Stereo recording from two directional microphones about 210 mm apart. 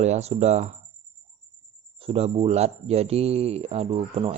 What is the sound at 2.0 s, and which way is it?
Speech, 25° right (ahead or behind).